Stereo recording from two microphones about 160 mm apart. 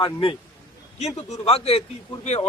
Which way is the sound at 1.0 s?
45° left (ahead or behind).